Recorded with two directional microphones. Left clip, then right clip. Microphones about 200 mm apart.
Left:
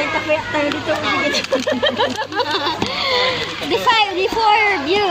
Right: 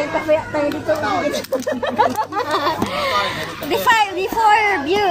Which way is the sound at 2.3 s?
35° right (ahead or behind).